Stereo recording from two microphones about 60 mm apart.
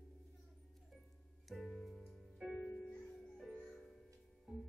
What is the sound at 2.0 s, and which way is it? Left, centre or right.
Music, centre.